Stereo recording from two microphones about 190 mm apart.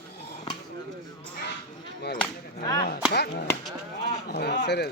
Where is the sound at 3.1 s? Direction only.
60° left (ahead or behind).